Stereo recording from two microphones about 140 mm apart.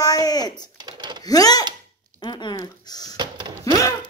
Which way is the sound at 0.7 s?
30° right (ahead or behind).